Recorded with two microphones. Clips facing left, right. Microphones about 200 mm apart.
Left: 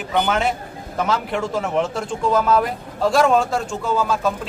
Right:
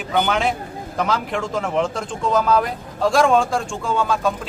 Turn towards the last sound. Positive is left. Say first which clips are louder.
# even
turn(degrees=5)  # may be behind; listen again after turning